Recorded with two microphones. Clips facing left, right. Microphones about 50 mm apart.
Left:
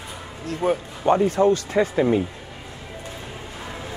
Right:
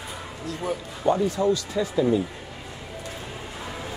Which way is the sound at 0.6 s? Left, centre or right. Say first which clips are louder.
Left 4 dB; left.